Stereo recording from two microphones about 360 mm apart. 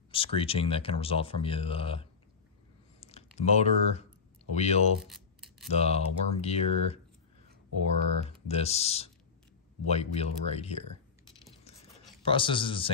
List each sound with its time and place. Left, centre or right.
0.1 s speech: centre
3.0 s a sound: centre
4.6 s speech: centre
5.0 s a sound: centre
5.7 s speech: centre
8.5 s speech: centre
12.2 s speech: centre